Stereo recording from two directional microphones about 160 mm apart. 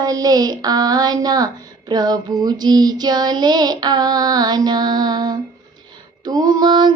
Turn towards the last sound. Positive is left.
turn(degrees=-25)  # may be behind; listen again after turning